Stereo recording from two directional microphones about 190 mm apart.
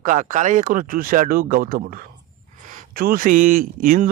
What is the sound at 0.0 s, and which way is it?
A man's voice, 45° right (ahead or behind).